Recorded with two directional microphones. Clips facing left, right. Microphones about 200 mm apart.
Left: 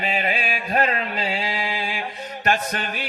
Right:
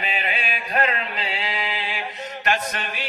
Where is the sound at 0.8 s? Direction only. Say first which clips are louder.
Left 2 dB; 45° left (ahead or behind).